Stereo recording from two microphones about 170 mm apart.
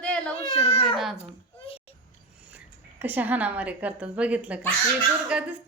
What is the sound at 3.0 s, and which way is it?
A woman's voice, 10° right (ahead or behind).